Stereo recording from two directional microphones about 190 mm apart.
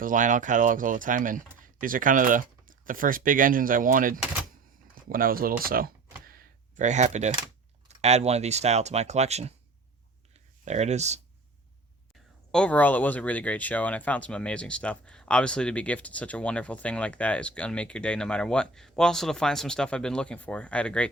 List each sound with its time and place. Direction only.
0.0 s speech: 45° right (ahead or behind)
5.0 s computer keyboard: 50° right (ahead or behind)
7.9 s speech: 35° right (ahead or behind)
10.7 s speech: 35° right (ahead or behind)
12.5 s speech: 5° left (ahead or behind)